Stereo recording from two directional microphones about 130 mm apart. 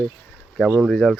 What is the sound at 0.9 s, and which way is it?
Speech, 5° left (ahead or behind).